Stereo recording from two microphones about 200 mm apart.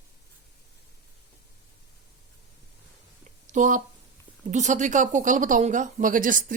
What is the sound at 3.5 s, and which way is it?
Speech, 40° right (ahead or behind).